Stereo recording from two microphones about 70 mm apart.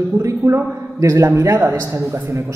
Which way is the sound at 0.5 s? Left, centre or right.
Right.